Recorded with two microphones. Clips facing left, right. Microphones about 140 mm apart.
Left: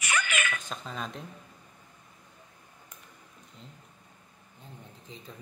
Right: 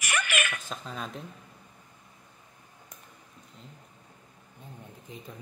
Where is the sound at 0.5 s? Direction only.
Centre (ahead or behind).